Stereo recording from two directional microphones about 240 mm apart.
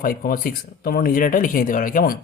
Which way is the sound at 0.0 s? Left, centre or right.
Left.